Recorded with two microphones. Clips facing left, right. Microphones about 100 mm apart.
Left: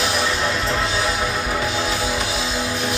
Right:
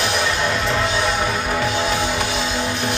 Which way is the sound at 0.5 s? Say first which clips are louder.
Right 2 dB; centre (ahead or behind).